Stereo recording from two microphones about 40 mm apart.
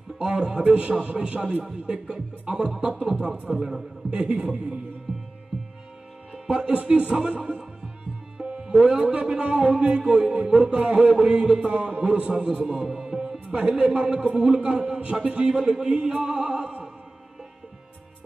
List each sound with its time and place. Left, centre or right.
0.2 s music: right
2.4 s speech: centre
2.8 s music: right
3.4 s speech: centre
4.1 s a man's voice: right
6.3 s speech: right
7.0 s music: right
15.9 s music: right